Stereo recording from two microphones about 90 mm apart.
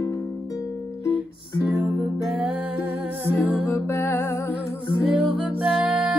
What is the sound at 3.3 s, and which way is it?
Music, 20° left (ahead or behind).